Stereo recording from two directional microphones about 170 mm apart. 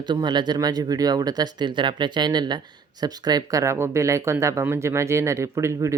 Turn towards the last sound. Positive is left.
turn(degrees=-15)  # may be behind; listen again after turning